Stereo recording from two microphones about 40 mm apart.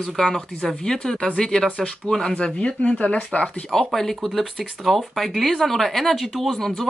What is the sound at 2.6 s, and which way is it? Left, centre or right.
Speech, left.